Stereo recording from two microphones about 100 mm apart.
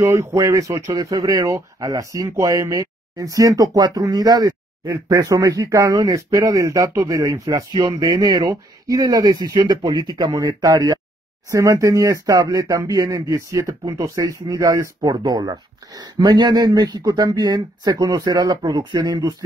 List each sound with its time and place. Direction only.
0.0 s speech: 25° right (ahead or behind)
7.4 s speech: 50° right (ahead or behind)